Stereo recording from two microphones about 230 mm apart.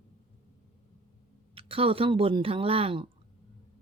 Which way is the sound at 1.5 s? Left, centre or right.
Right.